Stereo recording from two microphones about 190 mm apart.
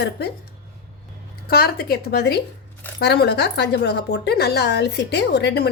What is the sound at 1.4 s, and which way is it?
Speech, 55° left (ahead or behind).